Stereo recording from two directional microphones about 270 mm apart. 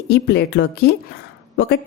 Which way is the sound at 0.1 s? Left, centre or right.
Left.